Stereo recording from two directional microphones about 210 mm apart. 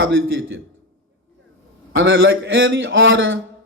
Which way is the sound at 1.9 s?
65° right (ahead or behind).